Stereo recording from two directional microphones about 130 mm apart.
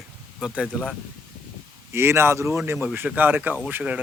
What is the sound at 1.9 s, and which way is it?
Speech, 20° right (ahead or behind).